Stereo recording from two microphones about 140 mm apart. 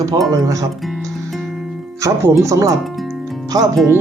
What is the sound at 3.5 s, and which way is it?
Speech, 25° right (ahead or behind).